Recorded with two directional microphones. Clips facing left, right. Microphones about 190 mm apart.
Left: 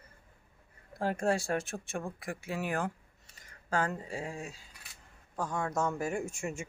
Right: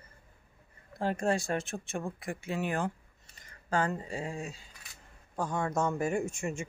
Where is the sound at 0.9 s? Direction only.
10° left (ahead or behind).